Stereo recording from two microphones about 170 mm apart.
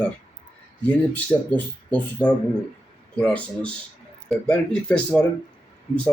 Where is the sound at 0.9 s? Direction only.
10° left (ahead or behind).